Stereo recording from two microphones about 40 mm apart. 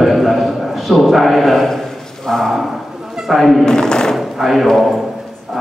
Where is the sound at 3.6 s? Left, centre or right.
Centre.